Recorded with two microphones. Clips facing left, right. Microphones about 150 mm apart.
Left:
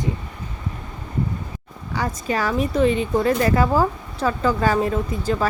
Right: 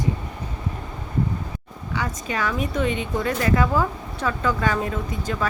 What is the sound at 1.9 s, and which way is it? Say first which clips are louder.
Speech: left 4 dB; 35° left (ahead or behind).